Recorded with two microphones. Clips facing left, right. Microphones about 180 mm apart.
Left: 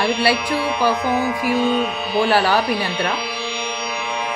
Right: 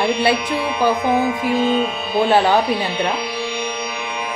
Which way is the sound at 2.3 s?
20° right (ahead or behind).